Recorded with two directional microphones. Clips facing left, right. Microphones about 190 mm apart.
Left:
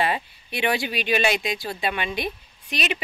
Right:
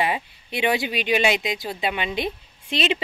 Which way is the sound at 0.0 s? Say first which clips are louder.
Even; 15° right (ahead or behind).